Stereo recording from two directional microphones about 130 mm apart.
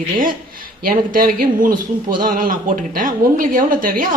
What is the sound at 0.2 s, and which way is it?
Speech, 90° right.